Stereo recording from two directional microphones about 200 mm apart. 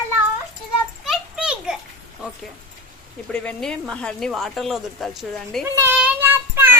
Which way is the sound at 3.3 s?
5° left (ahead or behind).